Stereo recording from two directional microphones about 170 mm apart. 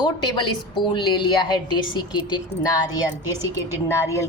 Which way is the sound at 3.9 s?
15° left (ahead or behind).